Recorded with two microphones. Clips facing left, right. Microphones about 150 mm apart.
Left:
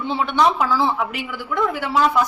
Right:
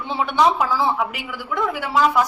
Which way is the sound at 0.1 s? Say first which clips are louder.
Right 1 dB; 10° right (ahead or behind).